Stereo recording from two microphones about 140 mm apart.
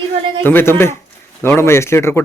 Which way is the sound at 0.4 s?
15° left (ahead or behind).